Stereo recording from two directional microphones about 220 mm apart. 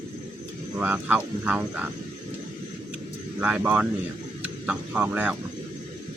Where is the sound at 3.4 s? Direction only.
5° right (ahead or behind).